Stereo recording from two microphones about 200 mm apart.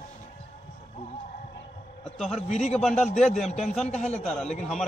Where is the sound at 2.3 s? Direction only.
35° left (ahead or behind).